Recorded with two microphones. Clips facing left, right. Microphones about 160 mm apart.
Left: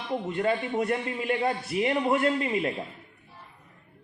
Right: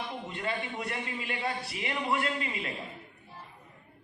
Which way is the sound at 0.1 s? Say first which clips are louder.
Left 9 dB; 50° left (ahead or behind).